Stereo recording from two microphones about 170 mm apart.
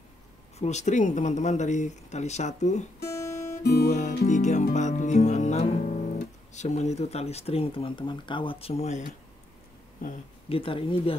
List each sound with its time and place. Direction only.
0.6 s speech: 40° left (ahead or behind)
3.0 s guitar: 15° left (ahead or behind)
4.3 s speech: 45° left (ahead or behind)
10.0 s speech: 55° left (ahead or behind)
10.5 s speech: 30° left (ahead or behind)